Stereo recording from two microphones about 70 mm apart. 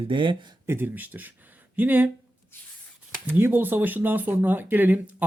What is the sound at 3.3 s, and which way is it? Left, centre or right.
Speech, right.